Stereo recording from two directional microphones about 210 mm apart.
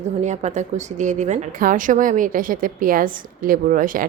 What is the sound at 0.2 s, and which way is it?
A woman's voice, 35° right (ahead or behind).